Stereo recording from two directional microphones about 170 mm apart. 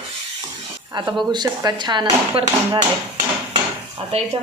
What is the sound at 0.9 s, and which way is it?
Speech, 25° right (ahead or behind).